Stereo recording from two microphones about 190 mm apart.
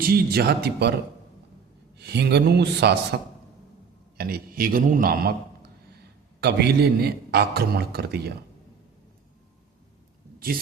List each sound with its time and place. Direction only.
0.0 s a man's voice: 55° right (ahead or behind)
2.0 s a man's voice: 60° right (ahead or behind)
4.2 s a man's voice: 50° right (ahead or behind)